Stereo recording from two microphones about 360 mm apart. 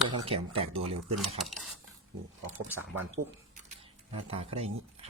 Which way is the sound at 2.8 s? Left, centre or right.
Centre.